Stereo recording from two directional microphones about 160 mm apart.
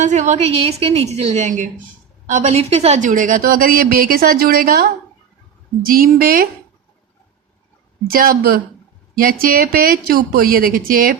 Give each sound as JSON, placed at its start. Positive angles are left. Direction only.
{"t": 0.0, "sound": "a woman's voice", "side_deg": -50}
{"t": 8.1, "sound": "a woman's voice", "side_deg": -65}